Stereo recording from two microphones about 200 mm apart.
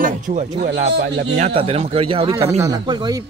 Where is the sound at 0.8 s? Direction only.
55° right (ahead or behind).